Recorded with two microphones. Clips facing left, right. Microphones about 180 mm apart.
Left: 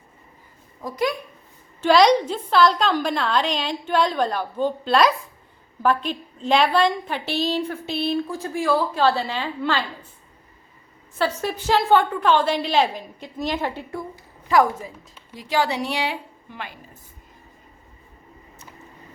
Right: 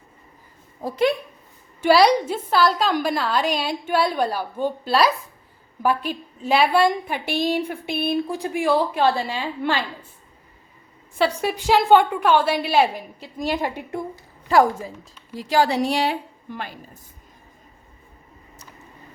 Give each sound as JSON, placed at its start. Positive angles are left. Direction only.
{"t": 0.8, "sound": "a woman's voice", "side_deg": -30}
{"t": 1.8, "sound": "a woman's voice", "side_deg": -5}
{"t": 11.2, "sound": "a woman's voice", "side_deg": -15}
{"t": 14.4, "sound": "a woman's voice", "side_deg": -35}